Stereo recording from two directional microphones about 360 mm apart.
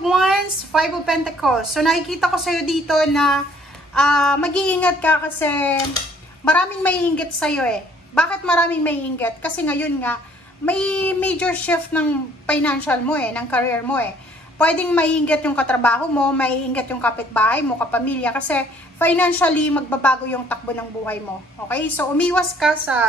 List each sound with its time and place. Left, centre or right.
0.0 s a woman's voice: centre